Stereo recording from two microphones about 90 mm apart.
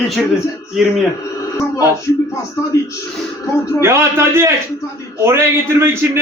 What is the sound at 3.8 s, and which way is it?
A man's voice, 30° right (ahead or behind).